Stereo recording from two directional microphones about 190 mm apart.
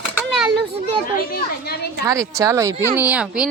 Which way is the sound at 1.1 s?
55° left (ahead or behind).